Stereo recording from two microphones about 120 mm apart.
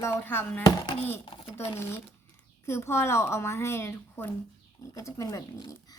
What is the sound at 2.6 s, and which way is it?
A woman's voice, 20° left (ahead or behind).